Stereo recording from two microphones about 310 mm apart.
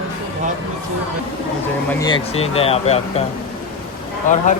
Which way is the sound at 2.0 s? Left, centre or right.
Centre.